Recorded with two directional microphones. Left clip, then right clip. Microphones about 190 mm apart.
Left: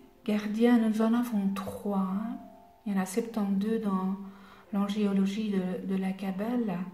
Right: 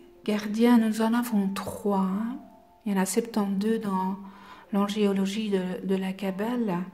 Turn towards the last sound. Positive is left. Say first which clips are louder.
# right 3 dB
turn(degrees=-50)  # may be behind; listen again after turning